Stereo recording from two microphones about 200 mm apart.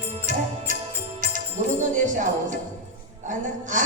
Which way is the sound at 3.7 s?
40° right (ahead or behind).